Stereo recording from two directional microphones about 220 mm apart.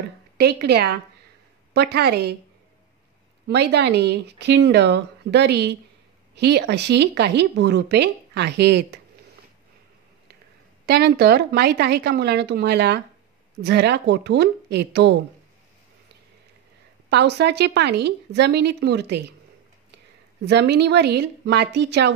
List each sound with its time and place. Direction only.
0.4 s speech: 50° right (ahead or behind)
3.4 s speech: 50° right (ahead or behind)
10.9 s speech: 45° right (ahead or behind)
17.1 s speech: 50° right (ahead or behind)
20.4 s speech: 50° right (ahead or behind)